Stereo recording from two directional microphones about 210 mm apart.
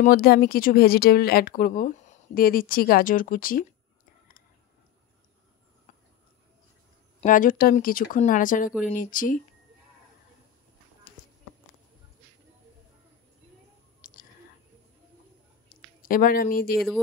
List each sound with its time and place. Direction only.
0.0 s speech: 45° left (ahead or behind)
7.2 s speech: 40° left (ahead or behind)
14.0 s whispering: 40° left (ahead or behind)
15.7 s speech: 40° left (ahead or behind)